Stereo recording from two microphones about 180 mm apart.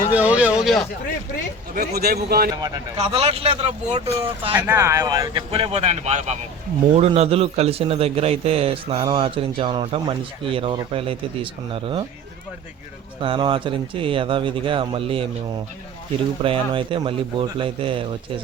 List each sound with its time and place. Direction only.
0.1 s a sound: 10° right (ahead or behind)
1.7 s a man's voice: 60° right (ahead or behind)
2.6 s speech: 20° right (ahead or behind)
3.0 s a man's voice: 35° right (ahead or behind)
4.5 s speech: 15° right (ahead or behind)
5.5 s a man's voice: 30° right (ahead or behind)
13.2 s speech: 30° right (ahead or behind)
16.4 s speech: 30° right (ahead or behind)